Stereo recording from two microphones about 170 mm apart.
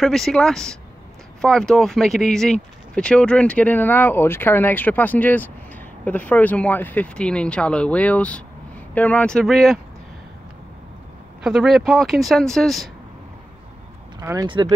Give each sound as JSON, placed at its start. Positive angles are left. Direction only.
{"t": 0.0, "sound": "speech", "side_deg": 0}
{"t": 11.4, "sound": "speech", "side_deg": 0}
{"t": 14.4, "sound": "speech", "side_deg": -30}